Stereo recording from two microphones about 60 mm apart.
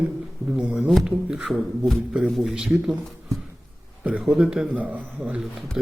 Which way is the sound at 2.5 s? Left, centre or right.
Centre.